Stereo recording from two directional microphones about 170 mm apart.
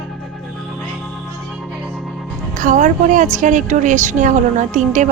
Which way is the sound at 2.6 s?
50° right (ahead or behind).